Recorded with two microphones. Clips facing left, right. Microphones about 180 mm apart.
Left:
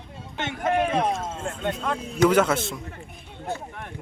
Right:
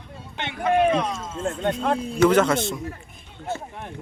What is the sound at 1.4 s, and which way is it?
Speech, 45° right (ahead or behind).